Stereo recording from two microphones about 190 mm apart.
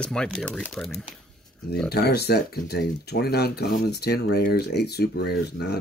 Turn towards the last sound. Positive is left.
turn(degrees=60)  # may be behind; listen again after turning